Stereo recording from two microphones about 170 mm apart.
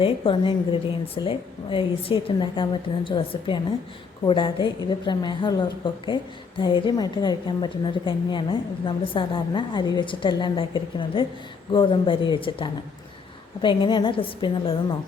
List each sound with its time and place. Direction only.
0.0 s a woman's voice: 30° left (ahead or behind)